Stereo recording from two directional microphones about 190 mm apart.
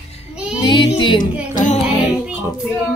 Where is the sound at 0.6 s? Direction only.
25° left (ahead or behind).